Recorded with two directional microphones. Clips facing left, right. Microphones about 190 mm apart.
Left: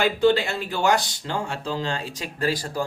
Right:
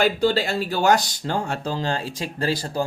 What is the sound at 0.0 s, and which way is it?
Speech, 40° right (ahead or behind).